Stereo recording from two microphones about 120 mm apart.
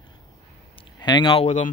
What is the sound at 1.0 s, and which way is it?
Speech, 40° left (ahead or behind).